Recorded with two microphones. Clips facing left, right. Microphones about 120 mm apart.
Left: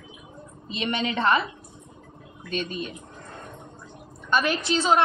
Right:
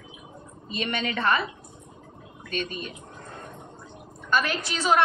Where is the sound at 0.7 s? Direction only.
20° left (ahead or behind).